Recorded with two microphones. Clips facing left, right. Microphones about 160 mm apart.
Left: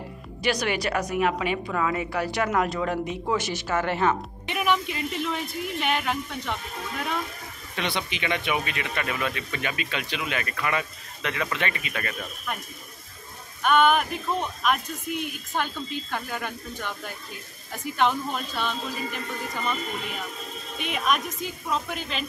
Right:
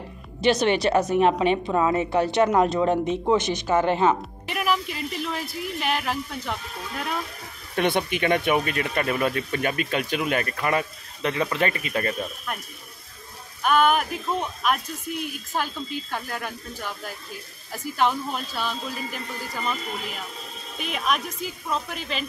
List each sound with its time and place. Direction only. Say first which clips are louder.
0.4 s a woman's voice: right 6 dB; 25° right (ahead or behind)
4.5 s speech: even; centre (ahead or behind)
7.7 s speech: right 7 dB; 50° right (ahead or behind)
13.6 s speech: even; 5° right (ahead or behind)
20.8 s speech: even; centre (ahead or behind)